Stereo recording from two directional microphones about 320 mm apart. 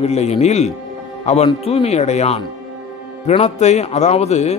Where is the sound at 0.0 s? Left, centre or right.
Centre.